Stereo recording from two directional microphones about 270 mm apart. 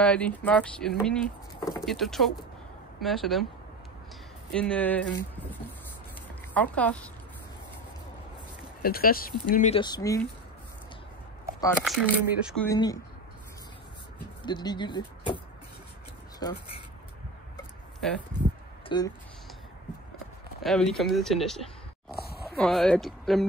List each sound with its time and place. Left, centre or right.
0.0 s speech: centre
4.5 s speech: centre
6.5 s speech: centre
8.8 s speech: left; by 10.2 s centre
11.8 s speech: centre
12.6 s speech: centre
14.4 s speech: centre
18.0 s speech: centre
18.9 s speech: centre
20.6 s speech: centre